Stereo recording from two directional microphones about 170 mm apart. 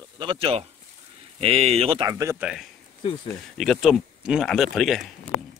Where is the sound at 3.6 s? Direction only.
Centre (ahead or behind).